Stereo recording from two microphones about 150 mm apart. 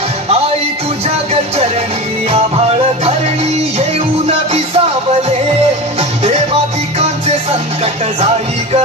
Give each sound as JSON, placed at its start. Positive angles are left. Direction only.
{"t": 4.3, "sound": "music", "side_deg": -45}
{"t": 5.9, "sound": "music", "side_deg": -50}